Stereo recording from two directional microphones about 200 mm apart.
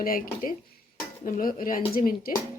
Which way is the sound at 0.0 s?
45° left (ahead or behind).